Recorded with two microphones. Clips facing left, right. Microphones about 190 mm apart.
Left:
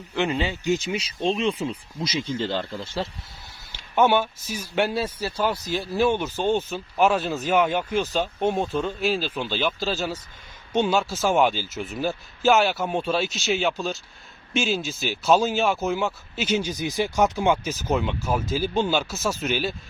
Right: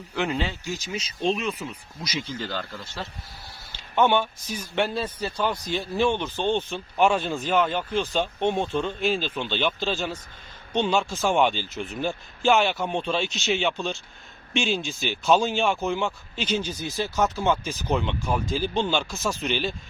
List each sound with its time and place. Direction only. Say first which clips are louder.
0.1 s speech: left 2 dB; centre (ahead or behind)
0.9 s speech: left 1 dB; 30° left (ahead or behind)
3.7 s a man's voice: left 2 dB; 10° left (ahead or behind)